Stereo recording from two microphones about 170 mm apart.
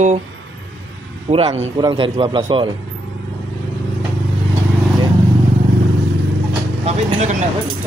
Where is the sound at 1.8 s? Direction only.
25° right (ahead or behind).